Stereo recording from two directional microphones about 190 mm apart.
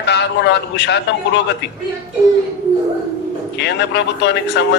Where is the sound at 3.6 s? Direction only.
65° left (ahead or behind).